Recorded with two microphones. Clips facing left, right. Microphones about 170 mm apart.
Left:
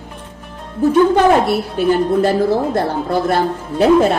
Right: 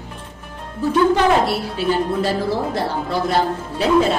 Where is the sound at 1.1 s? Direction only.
50° left (ahead or behind).